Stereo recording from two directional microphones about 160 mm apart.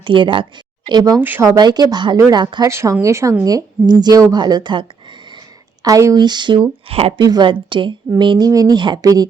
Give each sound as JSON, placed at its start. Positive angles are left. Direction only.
{"t": 0.0, "sound": "speech", "side_deg": -30}
{"t": 1.2, "sound": "a woman's voice", "side_deg": -15}
{"t": 6.8, "sound": "a woman's voice", "side_deg": -40}